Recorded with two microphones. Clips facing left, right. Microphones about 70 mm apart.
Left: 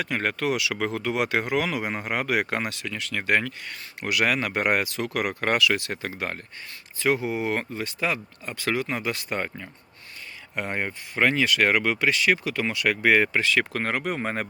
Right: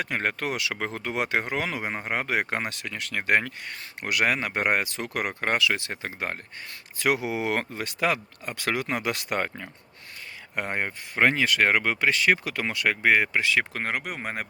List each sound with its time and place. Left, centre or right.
0.0 s speech: right
5.4 s speech: right
7.0 s speech: right
10.7 s speech: right
12.9 s speech: centre